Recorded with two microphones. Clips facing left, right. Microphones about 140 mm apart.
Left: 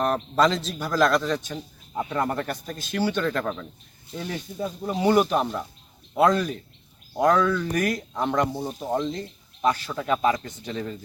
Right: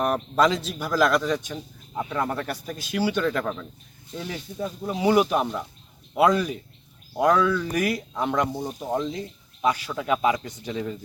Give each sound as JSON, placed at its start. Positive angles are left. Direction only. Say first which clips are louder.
{"t": 0.0, "sound": "speech", "louder": "even", "side_deg": -5}
{"t": 2.0, "sound": "a man's voice", "louder": "left 1 dB", "side_deg": 5}
{"t": 9.0, "sound": "speech", "louder": "left 1 dB", "side_deg": -5}